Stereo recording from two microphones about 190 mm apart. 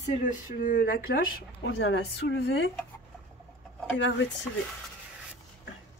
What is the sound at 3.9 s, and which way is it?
Speech, 70° left (ahead or behind).